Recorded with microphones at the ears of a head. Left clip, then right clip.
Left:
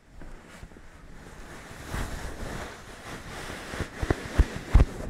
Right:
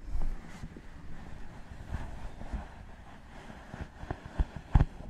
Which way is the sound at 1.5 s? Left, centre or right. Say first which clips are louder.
Left 13 dB; left.